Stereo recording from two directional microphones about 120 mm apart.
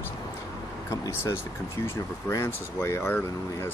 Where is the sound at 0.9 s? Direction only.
25° left (ahead or behind).